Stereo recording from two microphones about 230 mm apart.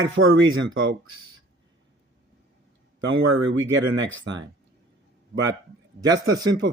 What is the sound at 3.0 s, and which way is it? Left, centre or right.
Speech, right.